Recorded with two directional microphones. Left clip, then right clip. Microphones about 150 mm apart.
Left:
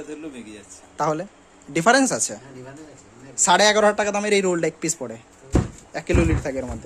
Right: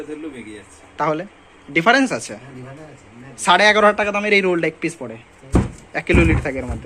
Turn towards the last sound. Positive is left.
turn(degrees=15)  # may be behind; listen again after turning